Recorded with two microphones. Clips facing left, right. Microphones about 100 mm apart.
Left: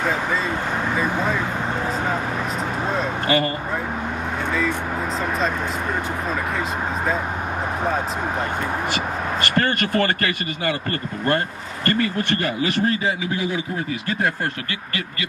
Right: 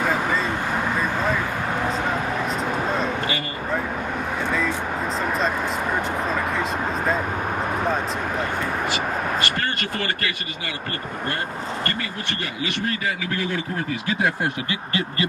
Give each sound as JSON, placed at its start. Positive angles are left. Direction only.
{"t": 9.4, "sound": "speech", "side_deg": 45}
{"t": 11.9, "sound": "speech", "side_deg": 45}
{"t": 13.3, "sound": "speech", "side_deg": 15}
{"t": 13.7, "sound": "speech", "side_deg": 0}
{"t": 14.7, "sound": "speech", "side_deg": -30}